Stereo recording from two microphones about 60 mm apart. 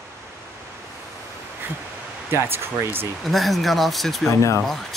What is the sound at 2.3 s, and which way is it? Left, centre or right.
Speech, right.